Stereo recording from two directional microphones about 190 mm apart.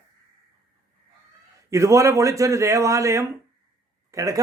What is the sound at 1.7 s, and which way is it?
Speech, 15° right (ahead or behind).